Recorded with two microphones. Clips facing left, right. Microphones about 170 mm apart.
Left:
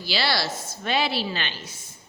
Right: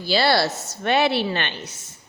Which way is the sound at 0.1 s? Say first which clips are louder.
Right 7 dB; 55° right (ahead or behind).